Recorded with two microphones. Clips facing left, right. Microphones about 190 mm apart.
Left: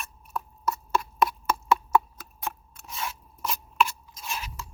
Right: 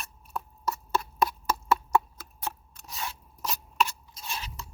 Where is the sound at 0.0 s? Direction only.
35° right (ahead or behind).